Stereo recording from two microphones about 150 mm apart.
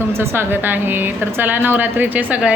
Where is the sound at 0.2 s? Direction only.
15° right (ahead or behind).